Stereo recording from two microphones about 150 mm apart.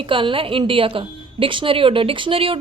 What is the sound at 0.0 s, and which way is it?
Speech, 35° right (ahead or behind).